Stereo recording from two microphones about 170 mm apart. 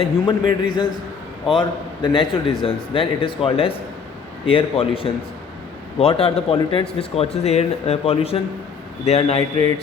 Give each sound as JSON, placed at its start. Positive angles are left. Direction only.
{"t": 0.0, "sound": "a man's voice", "side_deg": 30}